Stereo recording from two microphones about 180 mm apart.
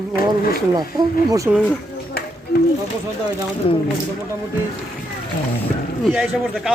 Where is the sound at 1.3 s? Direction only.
15° right (ahead or behind).